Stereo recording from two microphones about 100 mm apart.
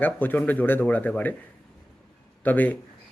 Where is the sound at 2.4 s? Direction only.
15° left (ahead or behind).